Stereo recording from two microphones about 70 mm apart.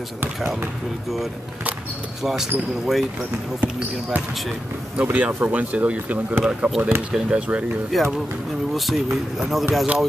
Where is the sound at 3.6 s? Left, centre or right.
Right.